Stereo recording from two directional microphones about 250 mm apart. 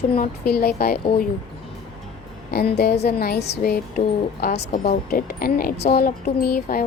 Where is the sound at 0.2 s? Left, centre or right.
Left.